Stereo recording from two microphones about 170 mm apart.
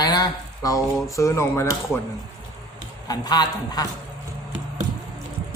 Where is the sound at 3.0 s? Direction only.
25° left (ahead or behind).